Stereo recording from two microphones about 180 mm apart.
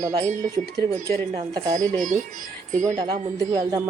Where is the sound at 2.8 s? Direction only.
20° right (ahead or behind).